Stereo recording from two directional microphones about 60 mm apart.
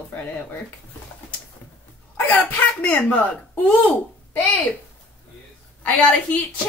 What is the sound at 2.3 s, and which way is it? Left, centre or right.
Speech, left.